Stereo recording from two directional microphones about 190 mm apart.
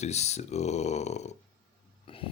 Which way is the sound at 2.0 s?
30° left (ahead or behind).